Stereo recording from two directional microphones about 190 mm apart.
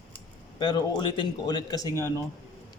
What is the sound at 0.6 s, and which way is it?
Speech, 25° left (ahead or behind).